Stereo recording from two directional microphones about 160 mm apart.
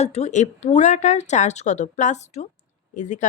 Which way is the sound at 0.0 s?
45° left (ahead or behind).